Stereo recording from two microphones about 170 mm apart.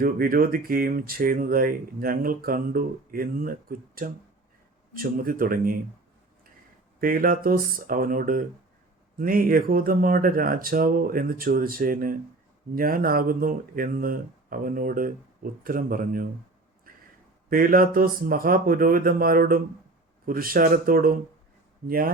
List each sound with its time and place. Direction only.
0.0 s speech: 55° right (ahead or behind)
7.0 s speech: 55° right (ahead or behind)
17.5 s speech: 55° right (ahead or behind)